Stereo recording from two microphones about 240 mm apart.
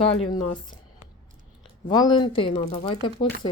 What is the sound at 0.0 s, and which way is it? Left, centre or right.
Speech, left.